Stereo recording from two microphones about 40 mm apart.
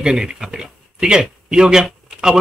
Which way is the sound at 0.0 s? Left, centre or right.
Centre.